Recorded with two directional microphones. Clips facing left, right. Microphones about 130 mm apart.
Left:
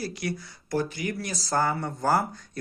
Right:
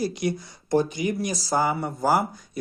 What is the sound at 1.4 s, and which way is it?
Speech, 10° right (ahead or behind).